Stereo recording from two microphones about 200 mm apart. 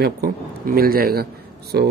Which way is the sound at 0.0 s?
50° right (ahead or behind).